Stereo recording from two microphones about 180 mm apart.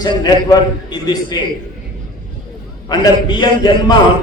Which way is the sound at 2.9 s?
25° left (ahead or behind).